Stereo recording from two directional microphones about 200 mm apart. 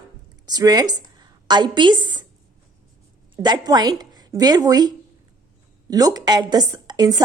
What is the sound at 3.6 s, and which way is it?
A woman's voice, 20° right (ahead or behind).